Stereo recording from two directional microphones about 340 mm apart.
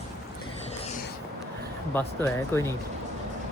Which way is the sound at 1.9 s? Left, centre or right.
Centre.